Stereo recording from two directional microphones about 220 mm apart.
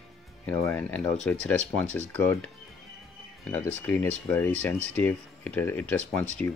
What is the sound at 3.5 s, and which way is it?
Speech, 10° left (ahead or behind).